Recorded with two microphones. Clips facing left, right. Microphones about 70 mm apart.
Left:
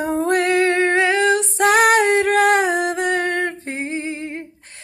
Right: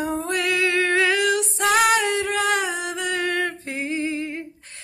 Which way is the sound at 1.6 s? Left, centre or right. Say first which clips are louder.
Left 5 dB; left.